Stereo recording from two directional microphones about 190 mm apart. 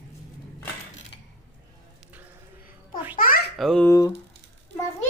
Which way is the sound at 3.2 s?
50° left (ahead or behind).